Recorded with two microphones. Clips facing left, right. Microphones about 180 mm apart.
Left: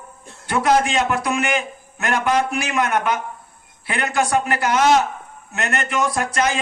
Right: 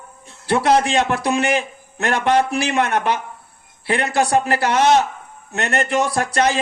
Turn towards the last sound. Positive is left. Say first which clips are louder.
# right 2 dB
turn(degrees=-35)  # may be behind; listen again after turning